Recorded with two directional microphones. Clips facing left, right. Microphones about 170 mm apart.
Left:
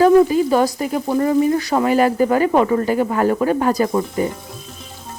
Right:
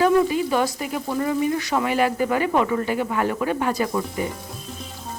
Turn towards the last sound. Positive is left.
turn(degrees=45)  # may be behind; listen again after turning